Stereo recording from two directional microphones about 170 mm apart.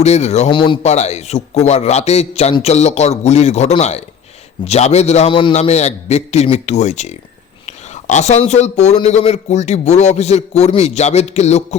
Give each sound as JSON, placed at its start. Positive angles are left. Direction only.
{"t": 0.0, "sound": "speech", "side_deg": 40}